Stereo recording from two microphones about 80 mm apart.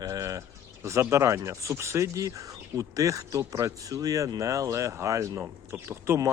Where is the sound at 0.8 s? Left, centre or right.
Right.